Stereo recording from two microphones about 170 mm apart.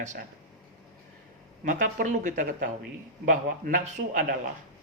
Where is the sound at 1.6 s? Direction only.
50° right (ahead or behind).